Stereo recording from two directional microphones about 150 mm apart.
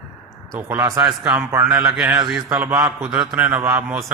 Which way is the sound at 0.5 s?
20° right (ahead or behind).